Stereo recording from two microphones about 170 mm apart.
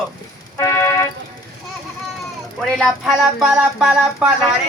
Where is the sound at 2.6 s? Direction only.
Centre (ahead or behind).